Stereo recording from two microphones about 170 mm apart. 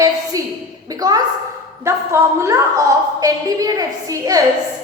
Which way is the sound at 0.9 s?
20° right (ahead or behind).